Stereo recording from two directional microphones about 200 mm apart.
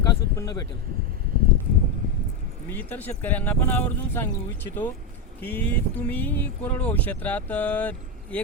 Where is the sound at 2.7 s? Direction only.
10° left (ahead or behind).